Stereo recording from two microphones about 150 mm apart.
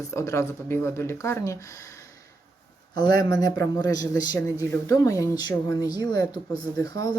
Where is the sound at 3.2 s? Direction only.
25° left (ahead or behind).